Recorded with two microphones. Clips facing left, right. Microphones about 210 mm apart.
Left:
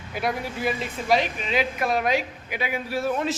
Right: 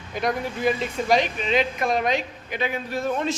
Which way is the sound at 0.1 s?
5° left (ahead or behind).